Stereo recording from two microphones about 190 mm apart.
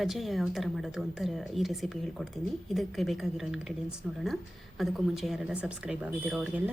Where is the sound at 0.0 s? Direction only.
Centre (ahead or behind).